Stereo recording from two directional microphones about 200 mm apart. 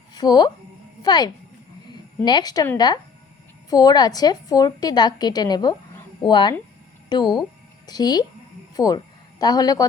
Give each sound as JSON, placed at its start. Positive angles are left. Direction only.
{"t": 0.1, "sound": "a woman's voice", "side_deg": 20}